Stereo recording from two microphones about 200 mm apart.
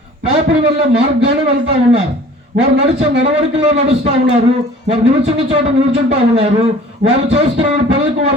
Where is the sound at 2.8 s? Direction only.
30° right (ahead or behind).